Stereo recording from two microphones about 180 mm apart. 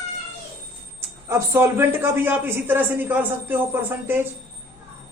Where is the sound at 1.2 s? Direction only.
15° right (ahead or behind).